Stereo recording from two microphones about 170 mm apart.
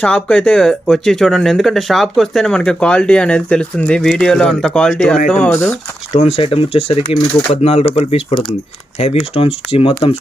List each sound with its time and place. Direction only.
0.0 s speech: 5° left (ahead or behind)
6.1 s speech: 35° left (ahead or behind)
10.0 s speech: 20° left (ahead or behind)